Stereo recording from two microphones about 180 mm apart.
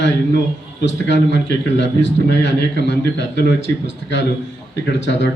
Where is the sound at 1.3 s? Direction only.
80° left.